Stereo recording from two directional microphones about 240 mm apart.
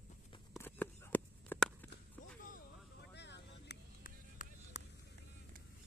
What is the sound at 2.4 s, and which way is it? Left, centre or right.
Vehicle, left.